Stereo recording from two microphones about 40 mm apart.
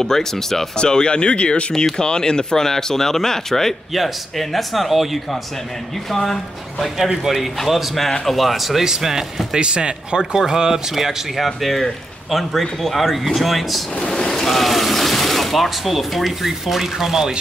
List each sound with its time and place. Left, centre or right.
0.0 s speech: centre
0.7 s speech: left
2.0 s a man's voice: centre
7.0 s a man's voice: centre
9.6 s speech: right
11.0 s a man's voice: centre
13.9 s a sound: centre